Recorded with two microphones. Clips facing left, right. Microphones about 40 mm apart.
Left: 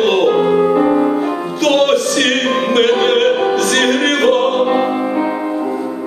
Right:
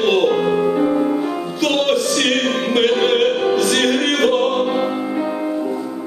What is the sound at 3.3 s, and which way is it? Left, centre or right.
Opera, centre.